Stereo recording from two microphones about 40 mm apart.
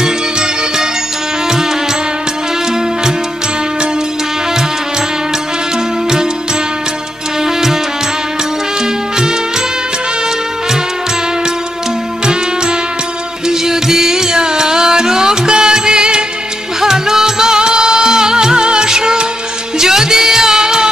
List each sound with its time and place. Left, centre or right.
0.0 s music: centre
7.4 s music: centre
13.5 s music: centre